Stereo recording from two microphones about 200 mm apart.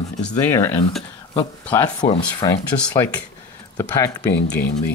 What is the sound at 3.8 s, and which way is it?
Speech, 15° left (ahead or behind).